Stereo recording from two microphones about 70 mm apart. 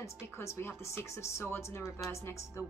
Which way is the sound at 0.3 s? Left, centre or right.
Left.